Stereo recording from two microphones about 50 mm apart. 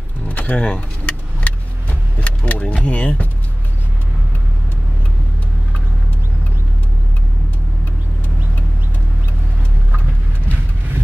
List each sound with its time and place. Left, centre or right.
0.3 s vehicle: left
2.9 s speech: left